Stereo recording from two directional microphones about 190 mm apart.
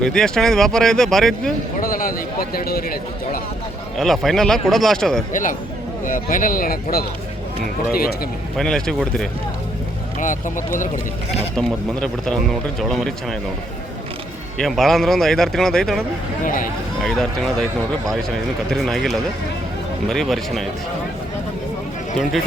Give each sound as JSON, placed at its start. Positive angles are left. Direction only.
{"t": 0.0, "sound": "a man's voice", "side_deg": 5}
{"t": 1.8, "sound": "speech", "side_deg": 50}
{"t": 3.9, "sound": "a man's voice", "side_deg": 0}
{"t": 5.3, "sound": "speech", "side_deg": 45}
{"t": 8.5, "sound": "a man's voice", "side_deg": 5}
{"t": 10.2, "sound": "speech", "side_deg": 45}
{"t": 11.5, "sound": "a man's voice", "side_deg": 5}
{"t": 14.6, "sound": "a man's voice", "side_deg": 0}
{"t": 16.4, "sound": "speech", "side_deg": 45}
{"t": 17.0, "sound": "a man's voice", "side_deg": 0}
{"t": 18.7, "sound": "a man's voice", "side_deg": 0}